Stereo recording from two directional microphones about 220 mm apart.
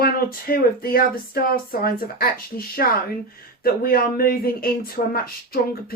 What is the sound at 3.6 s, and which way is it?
A woman's voice, 40° left (ahead or behind).